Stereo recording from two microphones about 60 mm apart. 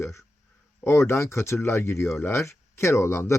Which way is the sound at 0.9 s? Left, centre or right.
Left.